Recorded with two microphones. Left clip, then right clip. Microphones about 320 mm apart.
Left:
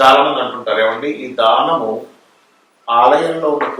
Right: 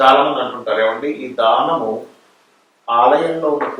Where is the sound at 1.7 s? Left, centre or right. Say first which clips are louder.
Left 2 dB; right.